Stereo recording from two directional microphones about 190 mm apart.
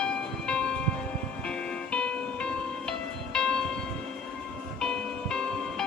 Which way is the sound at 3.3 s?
5° left (ahead or behind).